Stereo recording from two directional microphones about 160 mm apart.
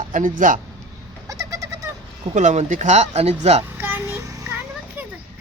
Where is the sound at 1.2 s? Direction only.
20° right (ahead or behind).